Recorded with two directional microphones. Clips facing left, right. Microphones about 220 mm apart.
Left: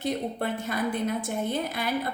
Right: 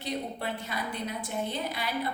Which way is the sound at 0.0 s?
50° left (ahead or behind).